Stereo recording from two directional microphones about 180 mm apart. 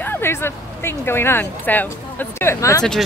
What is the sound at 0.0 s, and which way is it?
Speech, 10° left (ahead or behind).